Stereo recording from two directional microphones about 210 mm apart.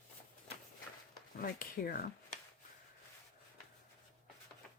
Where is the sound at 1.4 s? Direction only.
45° left (ahead or behind).